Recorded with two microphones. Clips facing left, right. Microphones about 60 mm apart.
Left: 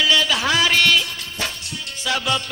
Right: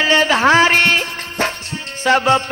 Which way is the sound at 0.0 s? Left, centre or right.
Right.